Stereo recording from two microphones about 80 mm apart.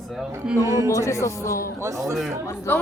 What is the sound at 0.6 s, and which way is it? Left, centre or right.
Speech, right.